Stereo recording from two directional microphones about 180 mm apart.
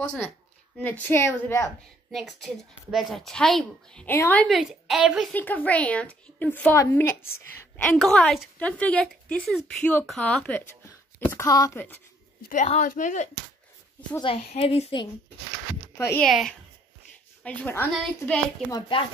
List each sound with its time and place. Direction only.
0.7 s a woman's voice: 10° left (ahead or behind)
2.1 s a woman's voice: centre (ahead or behind)
5.3 s a woman's voice: 10° left (ahead or behind)
12.4 s speech: 50° left (ahead or behind)
14.2 s a woman's voice: 30° left (ahead or behind)
16.0 s a woman's voice: 10° left (ahead or behind)
16.3 s a woman's voice: centre (ahead or behind)
18.7 s speech: 25° left (ahead or behind)